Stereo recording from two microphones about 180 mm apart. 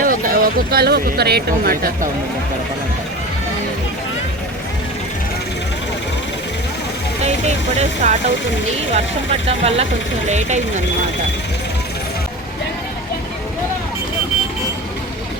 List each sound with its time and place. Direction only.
0.0 s speech: 50° right (ahead or behind)
7.8 s speech: 40° right (ahead or behind)
9.5 s speech: 35° right (ahead or behind)